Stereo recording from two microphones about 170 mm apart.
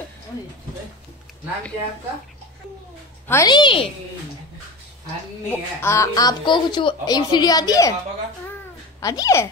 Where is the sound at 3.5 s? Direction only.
30° left (ahead or behind).